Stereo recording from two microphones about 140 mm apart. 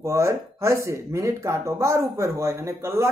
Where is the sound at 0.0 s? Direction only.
20° right (ahead or behind).